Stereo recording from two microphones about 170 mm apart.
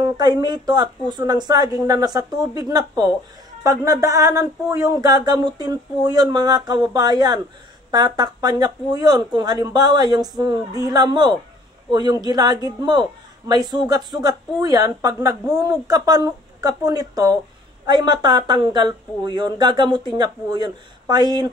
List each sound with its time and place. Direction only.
0.0 s a woman's voice: 25° right (ahead or behind)